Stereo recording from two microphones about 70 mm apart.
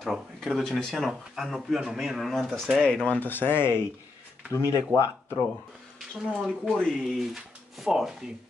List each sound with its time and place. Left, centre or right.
0.0 s speech: centre
3.2 s speech: left
4.5 s speech: left
5.9 s speech: centre
6.8 s speech: centre
7.8 s speech: centre